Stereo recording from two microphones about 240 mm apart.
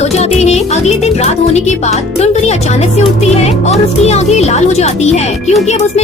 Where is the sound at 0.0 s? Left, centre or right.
Left.